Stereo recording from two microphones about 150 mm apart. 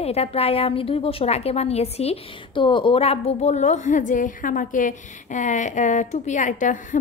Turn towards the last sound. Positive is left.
turn(degrees=60)  # may be behind; listen again after turning